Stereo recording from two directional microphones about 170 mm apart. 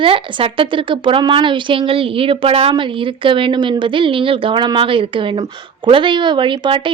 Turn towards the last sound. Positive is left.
turn(degrees=-30)  # may be behind; listen again after turning